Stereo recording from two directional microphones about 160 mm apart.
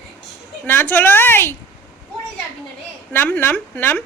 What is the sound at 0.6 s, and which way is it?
Speech, 15° left (ahead or behind).